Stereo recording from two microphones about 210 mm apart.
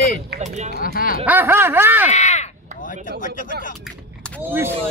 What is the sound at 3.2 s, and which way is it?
Speech, 40° left (ahead or behind).